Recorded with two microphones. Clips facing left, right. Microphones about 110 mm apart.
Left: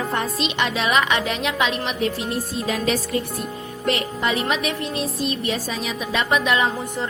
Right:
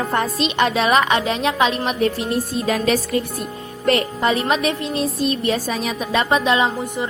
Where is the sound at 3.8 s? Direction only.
40° right (ahead or behind).